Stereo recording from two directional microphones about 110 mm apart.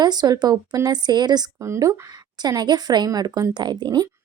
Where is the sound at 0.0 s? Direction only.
40° right (ahead or behind).